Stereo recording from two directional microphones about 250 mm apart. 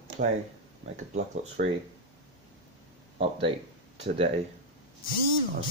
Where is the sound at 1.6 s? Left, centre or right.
Right.